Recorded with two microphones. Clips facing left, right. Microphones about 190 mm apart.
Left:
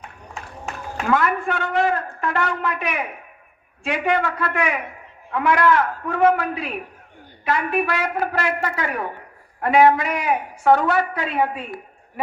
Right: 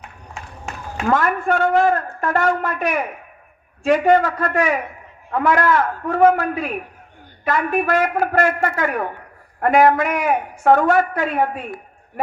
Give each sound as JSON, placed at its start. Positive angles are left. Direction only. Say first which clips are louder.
{"t": 1.0, "sound": "a woman's voice", "louder": "right 2 dB", "side_deg": -45}